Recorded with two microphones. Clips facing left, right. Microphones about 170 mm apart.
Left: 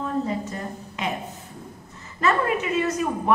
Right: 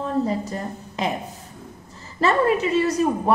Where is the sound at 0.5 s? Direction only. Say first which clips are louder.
Right 2 dB; 35° right (ahead or behind).